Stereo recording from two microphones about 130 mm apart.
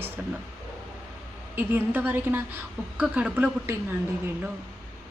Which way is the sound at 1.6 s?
15° right (ahead or behind).